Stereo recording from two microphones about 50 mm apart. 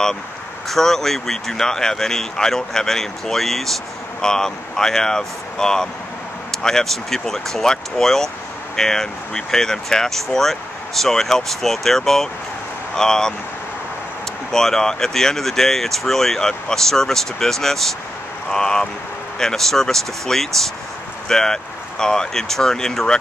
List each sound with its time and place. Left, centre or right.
0.7 s speech: centre
14.5 s speech: centre